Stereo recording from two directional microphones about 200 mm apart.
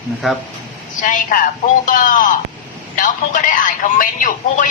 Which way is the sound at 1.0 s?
40° left (ahead or behind).